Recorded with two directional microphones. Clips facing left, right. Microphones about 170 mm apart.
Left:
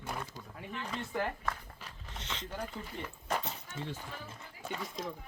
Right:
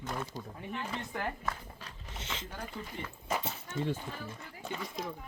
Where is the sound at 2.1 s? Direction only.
5° right (ahead or behind).